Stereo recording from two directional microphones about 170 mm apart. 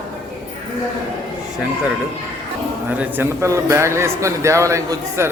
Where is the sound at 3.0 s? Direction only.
15° right (ahead or behind).